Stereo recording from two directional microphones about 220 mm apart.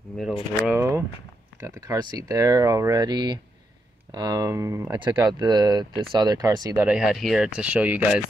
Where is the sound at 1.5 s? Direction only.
15° right (ahead or behind).